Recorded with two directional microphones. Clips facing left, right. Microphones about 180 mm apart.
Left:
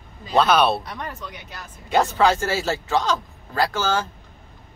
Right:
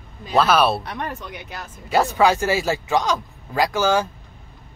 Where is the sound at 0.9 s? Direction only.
60° right (ahead or behind).